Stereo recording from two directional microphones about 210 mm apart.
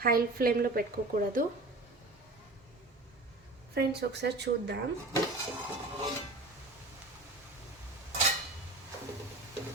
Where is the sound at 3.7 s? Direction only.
50° right (ahead or behind).